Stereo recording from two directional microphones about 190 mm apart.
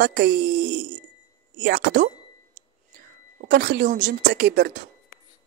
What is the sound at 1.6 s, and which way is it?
Speech, 65° right (ahead or behind).